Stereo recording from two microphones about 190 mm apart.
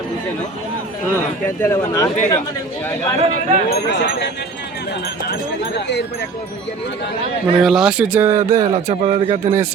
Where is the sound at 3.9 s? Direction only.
65° left (ahead or behind).